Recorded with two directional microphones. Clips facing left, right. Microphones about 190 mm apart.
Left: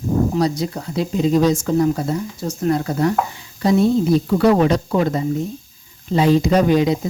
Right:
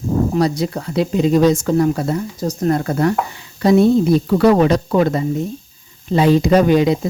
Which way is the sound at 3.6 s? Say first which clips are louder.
Right 4 dB; 65° right (ahead or behind).